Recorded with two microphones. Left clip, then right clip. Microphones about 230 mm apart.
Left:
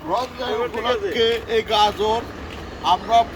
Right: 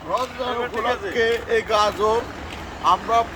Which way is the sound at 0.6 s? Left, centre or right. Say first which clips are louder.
Left 3 dB; centre.